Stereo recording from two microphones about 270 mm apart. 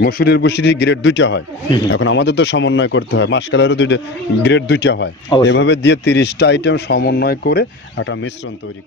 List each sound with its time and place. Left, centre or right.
0.0 s speech: left